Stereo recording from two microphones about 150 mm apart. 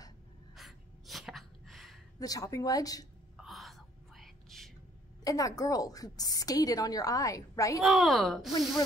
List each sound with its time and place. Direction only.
0.6 s a sound: centre (ahead or behind)
2.1 s a woman's voice: 25° left (ahead or behind)
3.3 s whispering: centre (ahead or behind)
5.2 s a woman's voice: 25° left (ahead or behind)
7.8 s a woman's voice: centre (ahead or behind)